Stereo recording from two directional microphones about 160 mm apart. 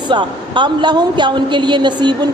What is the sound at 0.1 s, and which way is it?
A woman's voice, 30° right (ahead or behind).